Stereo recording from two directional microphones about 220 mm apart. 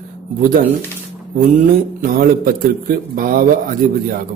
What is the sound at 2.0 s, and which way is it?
A man's voice, 40° right (ahead or behind).